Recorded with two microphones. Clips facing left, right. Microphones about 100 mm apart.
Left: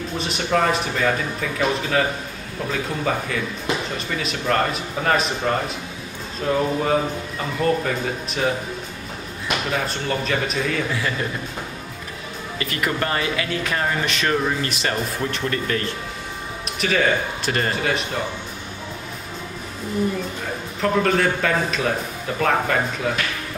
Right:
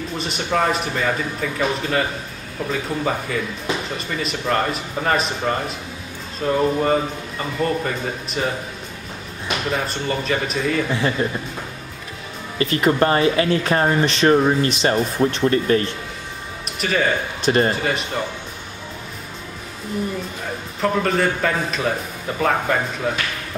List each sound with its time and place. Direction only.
0.2 s speech: centre (ahead or behind)
9.7 s speech: centre (ahead or behind)
10.9 s speech: 25° right (ahead or behind)
12.5 s speech: 30° right (ahead or behind)
16.8 s speech: centre (ahead or behind)
17.4 s speech: 25° right (ahead or behind)
20.8 s speech: centre (ahead or behind)